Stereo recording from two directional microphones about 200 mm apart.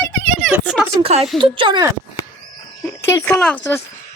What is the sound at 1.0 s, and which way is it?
Speech, 30° right (ahead or behind).